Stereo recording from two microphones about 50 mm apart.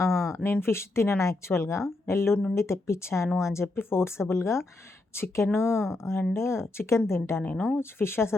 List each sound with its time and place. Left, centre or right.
0.1 s a sound: centre
0.4 s speech: left
7.4 s speech: left
7.8 s speech: left